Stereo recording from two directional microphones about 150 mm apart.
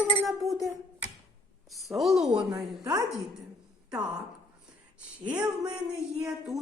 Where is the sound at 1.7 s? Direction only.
Centre (ahead or behind).